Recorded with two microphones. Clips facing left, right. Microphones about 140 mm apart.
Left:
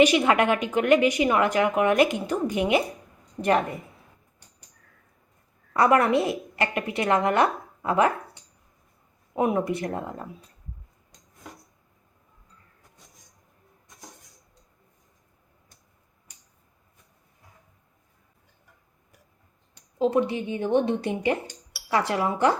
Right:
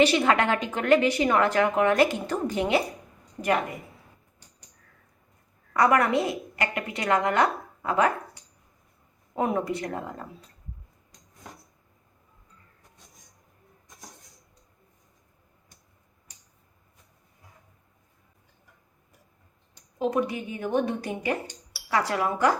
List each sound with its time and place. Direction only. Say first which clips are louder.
0.0 s a woman's voice: left 2 dB; 15° left (ahead or behind)
3.4 s speech: left 3 dB; 35° left (ahead or behind)
5.7 s a woman's voice: left 2 dB; 25° left (ahead or behind)
20.0 s a woman's voice: left 3 dB; 25° left (ahead or behind)